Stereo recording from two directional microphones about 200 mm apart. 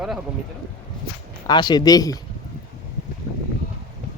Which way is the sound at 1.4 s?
20° left (ahead or behind).